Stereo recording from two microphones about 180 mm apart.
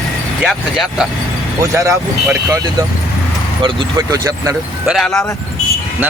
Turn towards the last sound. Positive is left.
turn(degrees=0)  # may be behind; listen again after turning